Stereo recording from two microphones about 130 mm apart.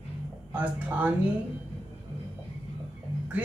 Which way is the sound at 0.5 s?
10° right (ahead or behind).